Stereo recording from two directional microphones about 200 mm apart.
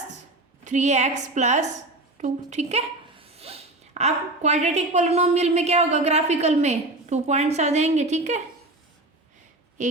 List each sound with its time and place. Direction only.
0.6 s speech: 35° right (ahead or behind)